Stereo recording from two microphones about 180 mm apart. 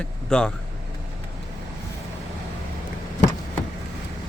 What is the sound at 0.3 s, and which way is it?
Speech, 5° left (ahead or behind).